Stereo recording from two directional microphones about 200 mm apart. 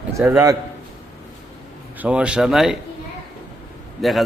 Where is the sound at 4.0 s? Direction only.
Centre (ahead or behind).